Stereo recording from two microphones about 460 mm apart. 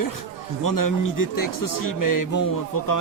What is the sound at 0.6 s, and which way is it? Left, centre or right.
A man's voice, left.